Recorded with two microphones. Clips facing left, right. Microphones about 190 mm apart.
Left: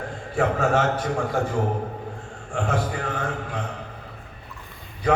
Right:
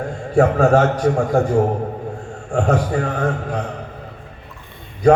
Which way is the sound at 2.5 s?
45° right (ahead or behind).